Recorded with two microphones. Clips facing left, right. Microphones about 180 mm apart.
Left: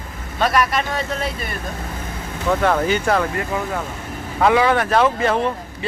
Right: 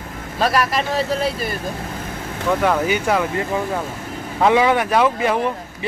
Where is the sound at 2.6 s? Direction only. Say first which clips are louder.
Left 1 dB; 10° right (ahead or behind).